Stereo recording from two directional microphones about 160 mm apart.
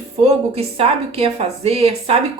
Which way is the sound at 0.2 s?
40° right (ahead or behind).